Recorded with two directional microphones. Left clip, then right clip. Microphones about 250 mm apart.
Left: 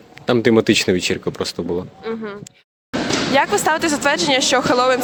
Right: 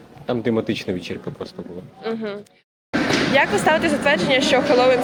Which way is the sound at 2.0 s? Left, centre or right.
Centre.